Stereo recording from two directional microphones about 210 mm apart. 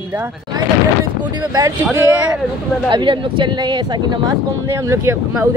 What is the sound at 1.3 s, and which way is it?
Speech, 15° right (ahead or behind).